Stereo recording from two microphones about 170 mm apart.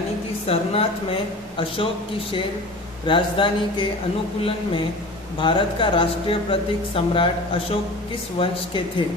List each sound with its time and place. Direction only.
0.4 s speech: 35° left (ahead or behind)
3.1 s speech: 30° left (ahead or behind)
5.4 s speech: 30° left (ahead or behind)